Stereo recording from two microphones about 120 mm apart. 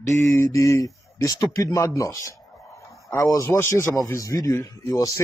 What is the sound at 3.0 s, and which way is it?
A man's voice, 30° left (ahead or behind).